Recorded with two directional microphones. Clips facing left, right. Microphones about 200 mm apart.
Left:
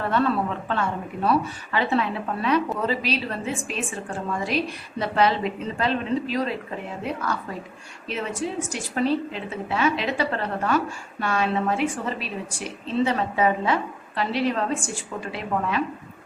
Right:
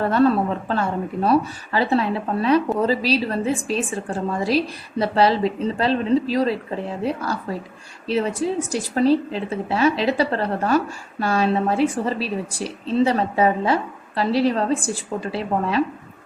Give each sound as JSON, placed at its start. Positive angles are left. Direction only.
{"t": 0.1, "sound": "a woman's voice", "side_deg": -40}